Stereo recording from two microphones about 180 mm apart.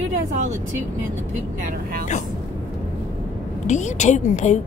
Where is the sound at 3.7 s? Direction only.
40° left (ahead or behind).